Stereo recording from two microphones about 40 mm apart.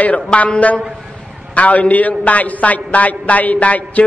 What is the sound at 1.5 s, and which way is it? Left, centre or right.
A man's voice, left.